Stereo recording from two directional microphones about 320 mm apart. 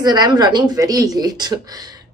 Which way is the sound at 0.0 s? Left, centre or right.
Centre.